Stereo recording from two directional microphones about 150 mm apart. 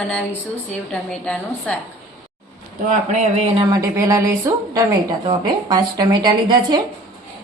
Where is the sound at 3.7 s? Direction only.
25° right (ahead or behind).